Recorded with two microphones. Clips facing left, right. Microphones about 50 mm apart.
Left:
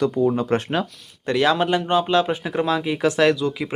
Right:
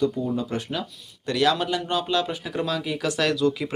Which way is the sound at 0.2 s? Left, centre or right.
Left.